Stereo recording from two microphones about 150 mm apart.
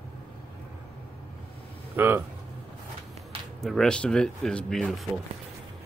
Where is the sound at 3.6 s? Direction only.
5° left (ahead or behind).